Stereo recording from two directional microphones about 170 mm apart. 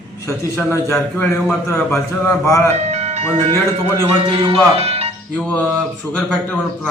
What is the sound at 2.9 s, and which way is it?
Music, 40° right (ahead or behind).